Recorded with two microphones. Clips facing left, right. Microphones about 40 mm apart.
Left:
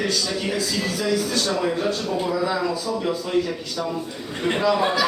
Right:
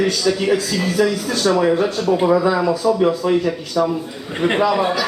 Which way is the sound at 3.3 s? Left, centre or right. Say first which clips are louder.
Right 6 dB; right.